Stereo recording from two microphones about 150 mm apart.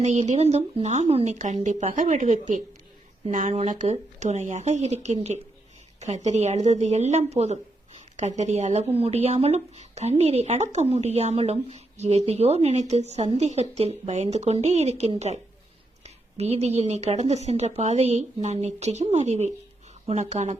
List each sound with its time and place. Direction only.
0.0 s speech: 50° right (ahead or behind)